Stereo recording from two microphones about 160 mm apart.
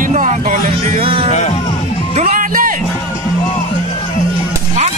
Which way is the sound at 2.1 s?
50° right (ahead or behind).